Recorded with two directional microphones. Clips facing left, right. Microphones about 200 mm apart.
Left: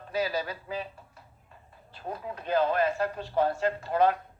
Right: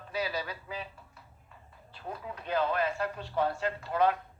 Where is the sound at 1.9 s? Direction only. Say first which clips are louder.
Left 4 dB; 40° left (ahead or behind).